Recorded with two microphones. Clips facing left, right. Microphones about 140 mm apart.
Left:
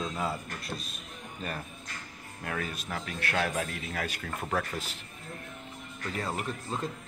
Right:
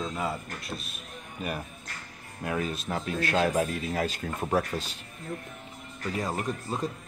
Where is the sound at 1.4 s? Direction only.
15° right (ahead or behind).